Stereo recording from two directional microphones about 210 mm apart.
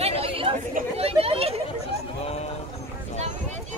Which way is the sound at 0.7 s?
30° right (ahead or behind).